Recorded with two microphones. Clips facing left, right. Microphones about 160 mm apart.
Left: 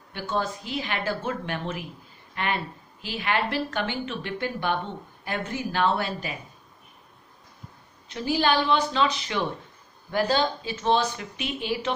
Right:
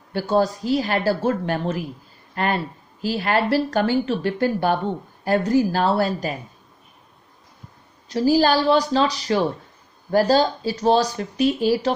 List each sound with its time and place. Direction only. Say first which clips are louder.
0.1 s speech: right 9 dB; 35° right (ahead or behind)
8.1 s speech: right 7 dB; 35° right (ahead or behind)